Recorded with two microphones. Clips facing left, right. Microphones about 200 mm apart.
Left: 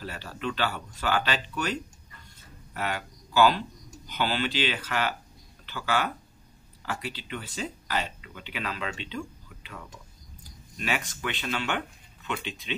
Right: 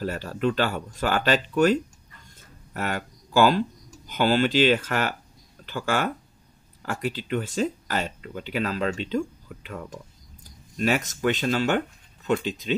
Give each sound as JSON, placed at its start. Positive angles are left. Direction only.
{"t": 0.0, "sound": "speech", "side_deg": -45}